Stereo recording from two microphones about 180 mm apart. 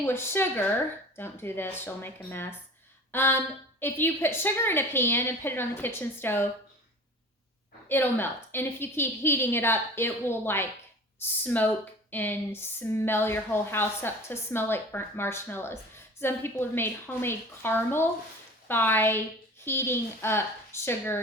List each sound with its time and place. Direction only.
0.0 s speech: 15° left (ahead or behind)
7.9 s speech: 10° left (ahead or behind)